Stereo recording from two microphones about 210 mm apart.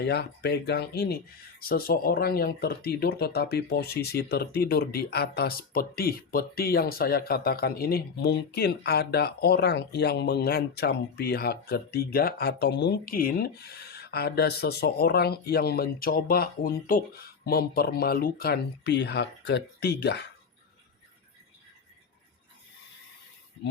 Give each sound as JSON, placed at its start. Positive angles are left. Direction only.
{"t": 0.0, "sound": "speech", "side_deg": 50}